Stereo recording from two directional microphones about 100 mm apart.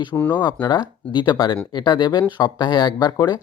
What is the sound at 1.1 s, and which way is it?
Speech, 50° left (ahead or behind).